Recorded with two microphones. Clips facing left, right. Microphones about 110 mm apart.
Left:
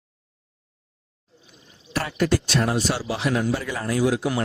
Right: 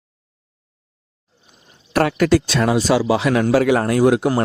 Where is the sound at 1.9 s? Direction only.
70° right (ahead or behind).